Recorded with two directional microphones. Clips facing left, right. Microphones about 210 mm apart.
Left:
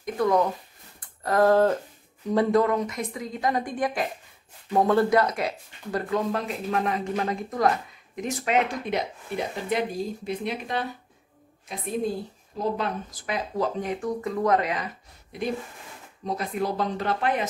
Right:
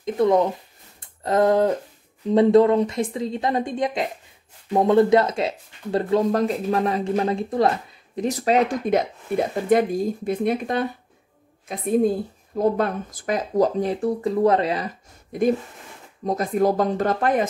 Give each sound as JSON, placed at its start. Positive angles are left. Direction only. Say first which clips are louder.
{"t": 0.0, "sound": "speech", "louder": "right 4 dB", "side_deg": -25}
{"t": 12.5, "sound": "speech", "louder": "right 7 dB", "side_deg": -50}
{"t": 15.3, "sound": "speech", "louder": "right 9 dB", "side_deg": -50}